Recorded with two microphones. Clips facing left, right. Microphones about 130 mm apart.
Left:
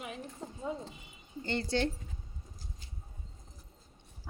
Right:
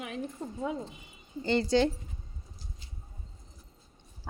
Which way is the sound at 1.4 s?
90° right.